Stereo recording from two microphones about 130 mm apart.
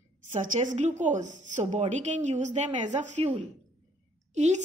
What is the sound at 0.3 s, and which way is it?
A woman's voice, 75° right (ahead or behind).